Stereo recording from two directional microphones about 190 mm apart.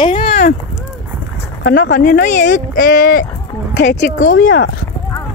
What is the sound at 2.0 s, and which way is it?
Speech, 45° left (ahead or behind).